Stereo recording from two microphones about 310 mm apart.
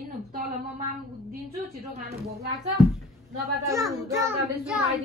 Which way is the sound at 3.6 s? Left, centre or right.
Centre.